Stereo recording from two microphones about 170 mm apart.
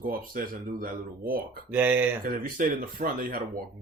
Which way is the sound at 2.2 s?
55° right (ahead or behind).